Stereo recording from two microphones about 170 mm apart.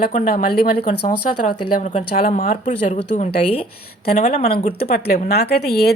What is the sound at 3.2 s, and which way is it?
Speech, 35° left (ahead or behind).